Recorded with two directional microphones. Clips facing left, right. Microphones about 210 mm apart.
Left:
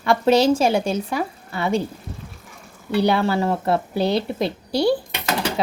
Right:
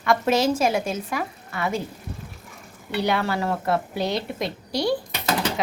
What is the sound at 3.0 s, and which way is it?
Speech, 30° left (ahead or behind).